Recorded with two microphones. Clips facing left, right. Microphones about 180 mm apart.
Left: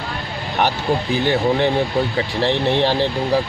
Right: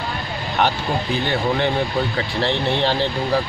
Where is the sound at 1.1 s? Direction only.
20° left (ahead or behind).